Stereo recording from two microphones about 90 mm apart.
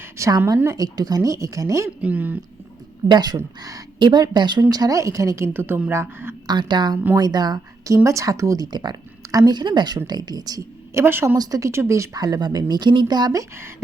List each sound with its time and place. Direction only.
0.0 s a sound: 35° right (ahead or behind)
0.3 s speech: 40° right (ahead or behind)
2.0 s speech: 20° right (ahead or behind)
3.1 s a woman's voice: 50° right (ahead or behind)
3.9 s speech: 60° right (ahead or behind)
4.7 s speech: 45° right (ahead or behind)
5.5 s speech: 25° right (ahead or behind)
6.5 s a woman's voice: 55° right (ahead or behind)
7.9 s a woman's voice: 35° right (ahead or behind)
10.9 s speech: 25° right (ahead or behind)
11.3 s a woman's voice: 40° right (ahead or behind)
11.7 s speech: 30° right (ahead or behind)
12.2 s a woman's voice: 50° right (ahead or behind)